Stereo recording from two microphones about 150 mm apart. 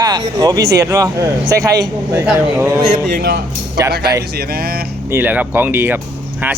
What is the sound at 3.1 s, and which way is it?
Speech, 90° right.